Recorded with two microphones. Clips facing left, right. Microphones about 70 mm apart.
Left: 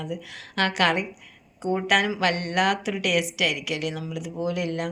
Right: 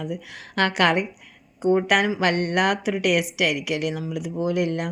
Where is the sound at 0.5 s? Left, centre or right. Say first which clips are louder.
Right 3 dB; right.